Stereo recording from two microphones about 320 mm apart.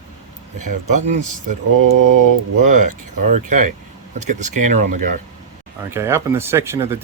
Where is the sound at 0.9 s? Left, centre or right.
Right.